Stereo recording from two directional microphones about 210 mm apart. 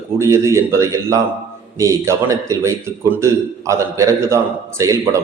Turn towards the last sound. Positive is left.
turn(degrees=-15)  # may be behind; listen again after turning